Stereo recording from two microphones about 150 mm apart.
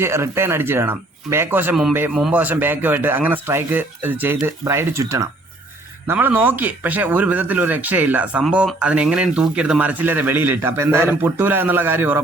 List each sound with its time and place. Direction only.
0.0 s speech: 15° right (ahead or behind)